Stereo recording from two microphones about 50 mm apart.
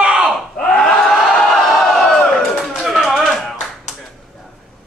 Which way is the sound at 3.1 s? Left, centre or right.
Centre.